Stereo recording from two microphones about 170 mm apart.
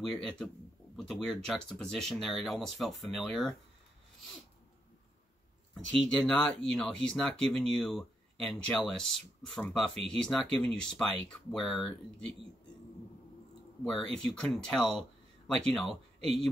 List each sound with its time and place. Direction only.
0.0 s speech: 5° left (ahead or behind)
5.9 s speech: 5° left (ahead or behind)
13.8 s speech: 5° left (ahead or behind)